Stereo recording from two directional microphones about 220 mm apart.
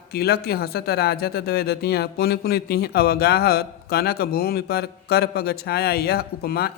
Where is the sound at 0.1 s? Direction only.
45° left (ahead or behind).